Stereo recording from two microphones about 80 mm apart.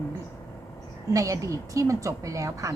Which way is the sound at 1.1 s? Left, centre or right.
Right.